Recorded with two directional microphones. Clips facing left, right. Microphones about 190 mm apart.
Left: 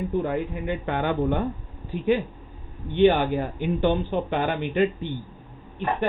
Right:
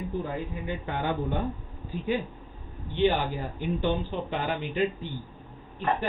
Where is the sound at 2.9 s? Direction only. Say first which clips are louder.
Left 6 dB; 60° left (ahead or behind).